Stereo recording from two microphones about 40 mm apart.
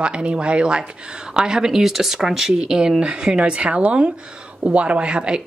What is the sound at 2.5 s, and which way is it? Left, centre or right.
Speech, right.